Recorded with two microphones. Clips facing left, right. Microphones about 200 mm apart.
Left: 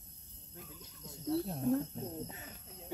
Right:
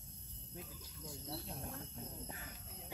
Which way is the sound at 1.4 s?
45° left (ahead or behind).